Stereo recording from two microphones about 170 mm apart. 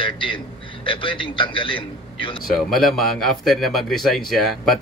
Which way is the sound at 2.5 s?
Centre (ahead or behind).